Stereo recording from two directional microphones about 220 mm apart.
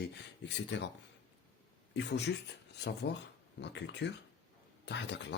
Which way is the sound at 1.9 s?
50° left (ahead or behind).